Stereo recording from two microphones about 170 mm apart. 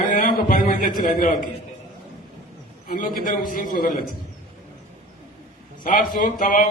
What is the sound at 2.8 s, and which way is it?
A man's voice, 55° left (ahead or behind).